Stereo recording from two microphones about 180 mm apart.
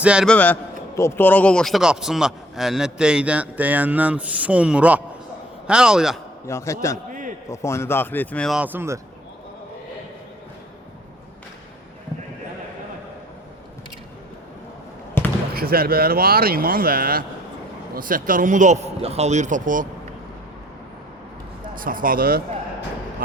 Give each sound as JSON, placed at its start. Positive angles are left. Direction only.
{"t": 0.0, "sound": "a man's voice", "side_deg": -5}
{"t": 0.3, "sound": "a man's voice", "side_deg": 10}
{"t": 6.5, "sound": "speech", "side_deg": 15}
{"t": 7.1, "sound": "a sound", "side_deg": -45}
{"t": 7.5, "sound": "speech", "side_deg": 15}
{"t": 15.5, "sound": "a man's voice", "side_deg": -55}
{"t": 21.8, "sound": "a man's voice", "side_deg": -50}